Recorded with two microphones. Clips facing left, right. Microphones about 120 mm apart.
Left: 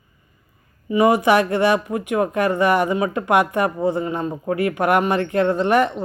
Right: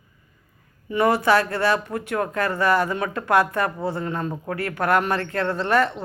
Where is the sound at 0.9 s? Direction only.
15° left (ahead or behind).